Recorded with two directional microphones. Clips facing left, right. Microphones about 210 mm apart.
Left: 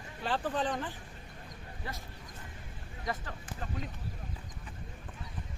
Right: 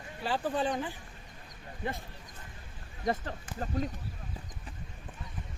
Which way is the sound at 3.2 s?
40° right (ahead or behind).